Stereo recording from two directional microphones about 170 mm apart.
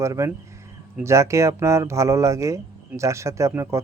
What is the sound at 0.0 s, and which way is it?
Speech, 20° right (ahead or behind).